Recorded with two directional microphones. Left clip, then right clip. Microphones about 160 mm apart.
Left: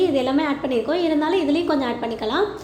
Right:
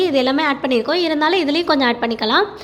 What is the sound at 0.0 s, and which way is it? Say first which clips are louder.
A woman's voice: right 4 dB; 15° right (ahead or behind).